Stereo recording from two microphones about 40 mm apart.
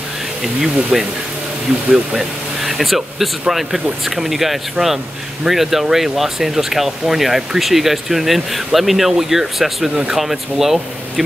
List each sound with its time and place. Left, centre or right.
0.4 s speech: centre
2.1 s speech: centre